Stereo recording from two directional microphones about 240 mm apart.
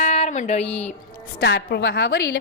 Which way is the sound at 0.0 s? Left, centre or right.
Left.